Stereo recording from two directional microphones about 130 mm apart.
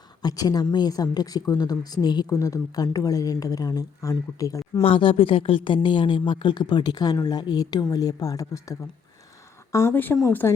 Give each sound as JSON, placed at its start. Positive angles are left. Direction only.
{"t": 0.2, "sound": "speech", "side_deg": 30}
{"t": 4.8, "sound": "speech", "side_deg": 45}